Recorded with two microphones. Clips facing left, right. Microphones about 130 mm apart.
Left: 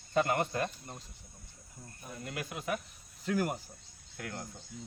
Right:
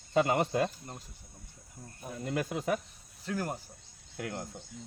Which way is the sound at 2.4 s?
35° right (ahead or behind).